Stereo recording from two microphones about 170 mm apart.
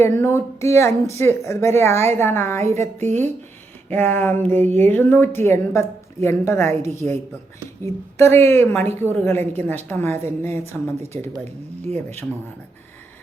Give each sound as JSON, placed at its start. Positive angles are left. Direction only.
{"t": 0.0, "sound": "a woman's voice", "side_deg": 15}
{"t": 3.0, "sound": "speech", "side_deg": -45}
{"t": 3.8, "sound": "a woman's voice", "side_deg": 10}
{"t": 8.2, "sound": "a woman's voice", "side_deg": 15}
{"t": 11.8, "sound": "speech", "side_deg": -40}